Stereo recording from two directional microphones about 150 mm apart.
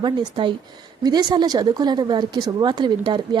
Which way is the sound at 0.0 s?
30° right (ahead or behind).